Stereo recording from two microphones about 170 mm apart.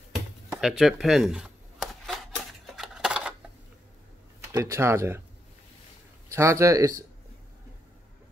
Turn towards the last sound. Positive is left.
turn(degrees=-20)  # may be behind; listen again after turning